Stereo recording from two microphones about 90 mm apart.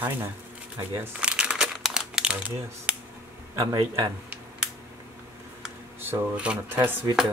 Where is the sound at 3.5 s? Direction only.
40° right (ahead or behind).